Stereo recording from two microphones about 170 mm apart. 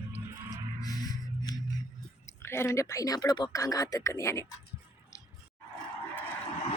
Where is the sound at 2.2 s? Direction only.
15° left (ahead or behind).